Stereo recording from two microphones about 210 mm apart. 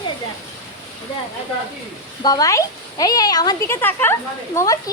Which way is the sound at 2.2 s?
15° left (ahead or behind).